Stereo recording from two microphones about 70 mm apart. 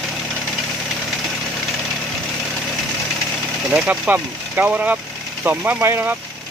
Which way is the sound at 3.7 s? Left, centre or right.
Centre.